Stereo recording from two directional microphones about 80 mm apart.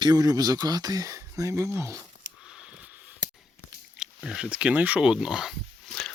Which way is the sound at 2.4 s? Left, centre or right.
Centre.